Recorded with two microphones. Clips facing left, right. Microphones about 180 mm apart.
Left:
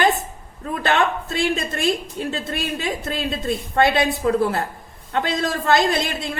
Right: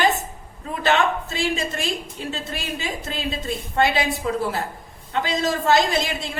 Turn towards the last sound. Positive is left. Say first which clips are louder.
# left 1 dB
turn(degrees=55)  # may be behind; listen again after turning